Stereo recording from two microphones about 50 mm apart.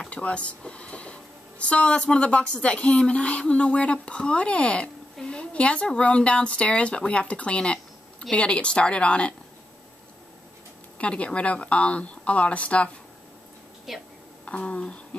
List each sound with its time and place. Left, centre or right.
0.1 s speech: left
5.2 s a sound: left
5.9 s speech: left
11.0 s speech: left
13.9 s speech: centre
14.4 s speech: left